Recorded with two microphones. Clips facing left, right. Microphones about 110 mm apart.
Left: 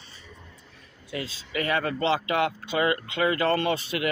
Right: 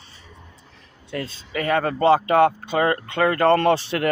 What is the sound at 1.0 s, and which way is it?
Speech, 50° right (ahead or behind).